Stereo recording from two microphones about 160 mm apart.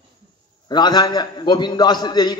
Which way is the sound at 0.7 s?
25° left (ahead or behind).